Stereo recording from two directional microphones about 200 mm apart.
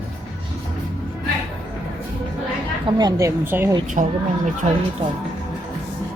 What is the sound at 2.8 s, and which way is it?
Speech, 15° right (ahead or behind).